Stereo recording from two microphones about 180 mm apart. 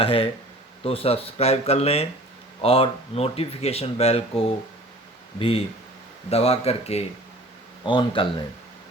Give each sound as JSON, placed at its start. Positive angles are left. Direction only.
{"t": 0.0, "sound": "speech", "side_deg": 30}